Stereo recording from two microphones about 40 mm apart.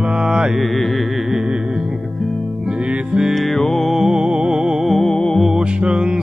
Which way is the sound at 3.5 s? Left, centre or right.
Centre.